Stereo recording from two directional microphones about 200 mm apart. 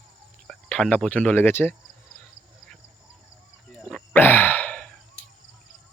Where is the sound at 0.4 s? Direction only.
5° left (ahead or behind).